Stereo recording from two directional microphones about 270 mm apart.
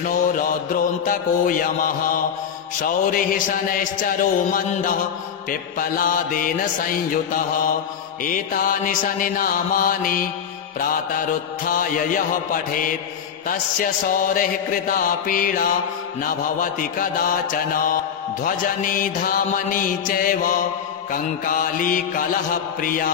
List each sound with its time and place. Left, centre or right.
0.0 s music: left
14.2 s music: left